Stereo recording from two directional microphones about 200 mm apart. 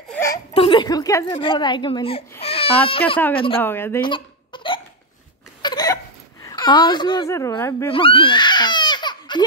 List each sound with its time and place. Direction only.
0.1 s a sound: 15° left (ahead or behind)
0.6 s a woman's voice: 25° left (ahead or behind)
2.4 s baby cry: 30° left (ahead or behind)
3.3 s speech: 25° left (ahead or behind)
3.6 s speech: 10° left (ahead or behind)
4.0 s hiccup: 25° left (ahead or behind)
5.6 s a sound: 20° left (ahead or behind)
6.4 s speech: 20° left (ahead or behind)
7.9 s baby cry: 25° left (ahead or behind)